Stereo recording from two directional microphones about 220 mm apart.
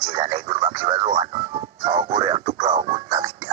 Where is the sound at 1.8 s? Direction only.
20° right (ahead or behind).